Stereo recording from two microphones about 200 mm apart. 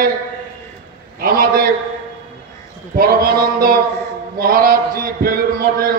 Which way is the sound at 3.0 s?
50° right (ahead or behind).